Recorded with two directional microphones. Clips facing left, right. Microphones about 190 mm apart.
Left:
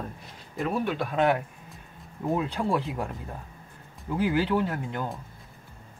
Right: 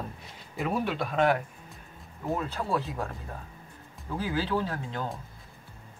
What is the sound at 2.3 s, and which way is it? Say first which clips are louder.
Speech: left 3 dB; 15° left (ahead or behind).